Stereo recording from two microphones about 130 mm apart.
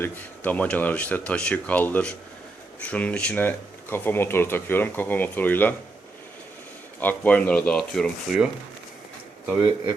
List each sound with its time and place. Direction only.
0.0 s speech: 10° left (ahead or behind)
7.0 s speech: 10° left (ahead or behind)